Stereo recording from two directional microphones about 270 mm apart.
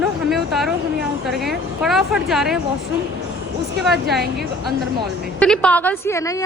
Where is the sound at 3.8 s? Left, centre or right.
Centre.